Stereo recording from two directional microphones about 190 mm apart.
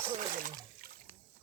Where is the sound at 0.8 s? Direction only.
50° right (ahead or behind).